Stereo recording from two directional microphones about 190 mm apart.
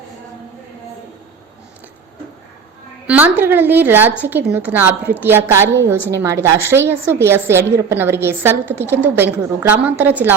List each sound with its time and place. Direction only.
3.1 s a woman's voice: 10° right (ahead or behind)